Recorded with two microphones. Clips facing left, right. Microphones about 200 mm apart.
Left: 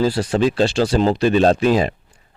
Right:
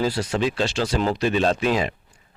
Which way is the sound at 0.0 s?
30° left (ahead or behind).